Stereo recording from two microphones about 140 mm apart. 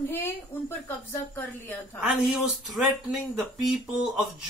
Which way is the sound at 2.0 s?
Centre (ahead or behind).